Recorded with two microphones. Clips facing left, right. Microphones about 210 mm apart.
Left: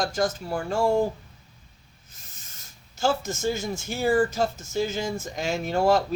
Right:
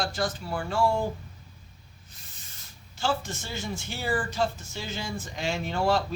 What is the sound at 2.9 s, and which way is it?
Speech, 45° left (ahead or behind).